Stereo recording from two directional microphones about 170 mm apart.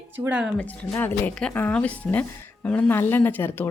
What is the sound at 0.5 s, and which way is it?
Speech, 10° left (ahead or behind).